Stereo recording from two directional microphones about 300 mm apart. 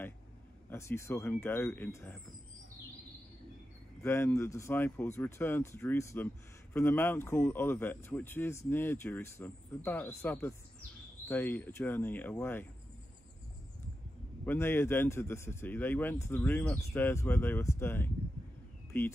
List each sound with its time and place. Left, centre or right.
0.7 s speech: centre
4.0 s speech: centre
14.4 s speech: centre